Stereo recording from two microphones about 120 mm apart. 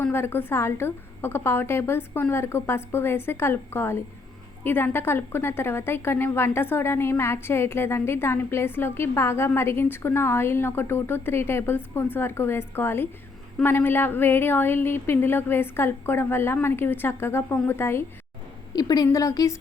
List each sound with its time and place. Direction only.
0.0 s a woman's voice: 20° left (ahead or behind)
18.7 s a woman's voice: 30° left (ahead or behind)